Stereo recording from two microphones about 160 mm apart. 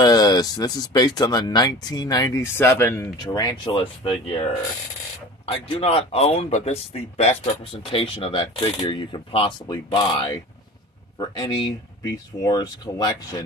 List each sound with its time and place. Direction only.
0.0 s speech: 25° left (ahead or behind)
3.3 s speech: 25° left (ahead or behind)